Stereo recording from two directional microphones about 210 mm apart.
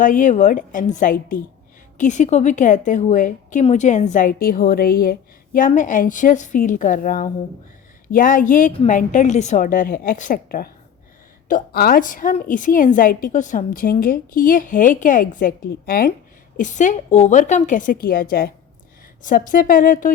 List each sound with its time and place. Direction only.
0.0 s a woman's voice: 40° left (ahead or behind)